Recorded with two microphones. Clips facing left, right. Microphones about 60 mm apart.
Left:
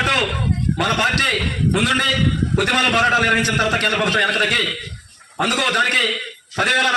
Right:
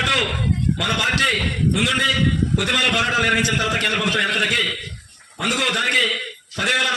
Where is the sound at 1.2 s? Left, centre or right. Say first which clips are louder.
Even; left.